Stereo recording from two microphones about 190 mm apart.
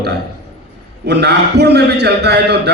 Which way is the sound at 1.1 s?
60° right (ahead or behind).